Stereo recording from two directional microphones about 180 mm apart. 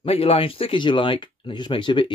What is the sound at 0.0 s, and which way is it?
Speech, 35° left (ahead or behind).